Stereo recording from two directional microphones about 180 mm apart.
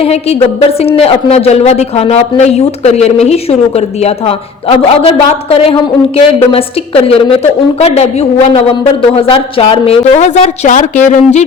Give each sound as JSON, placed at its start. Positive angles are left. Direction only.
{"t": 0.0, "sound": "speech", "side_deg": 35}